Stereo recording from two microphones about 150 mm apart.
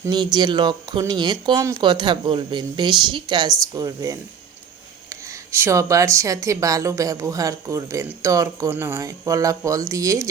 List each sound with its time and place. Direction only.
0.0 s speech: 30° right (ahead or behind)
5.3 s speech: 20° right (ahead or behind)